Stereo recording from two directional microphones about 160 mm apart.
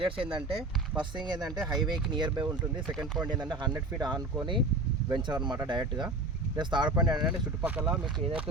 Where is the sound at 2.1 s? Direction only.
30° right (ahead or behind).